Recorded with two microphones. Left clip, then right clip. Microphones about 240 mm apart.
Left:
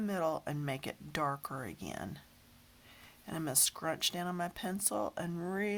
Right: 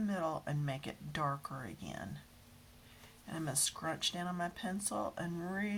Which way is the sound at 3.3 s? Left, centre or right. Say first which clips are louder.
Left 3 dB; left.